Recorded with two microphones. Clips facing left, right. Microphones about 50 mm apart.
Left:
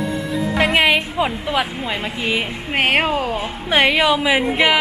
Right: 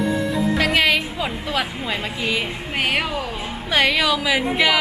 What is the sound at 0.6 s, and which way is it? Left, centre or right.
A woman's voice, left.